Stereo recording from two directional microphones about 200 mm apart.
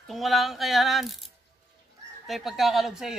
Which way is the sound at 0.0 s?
Centre (ahead or behind).